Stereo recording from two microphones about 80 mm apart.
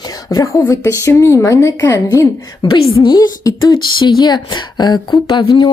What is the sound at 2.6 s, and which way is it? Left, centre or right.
Speech, left.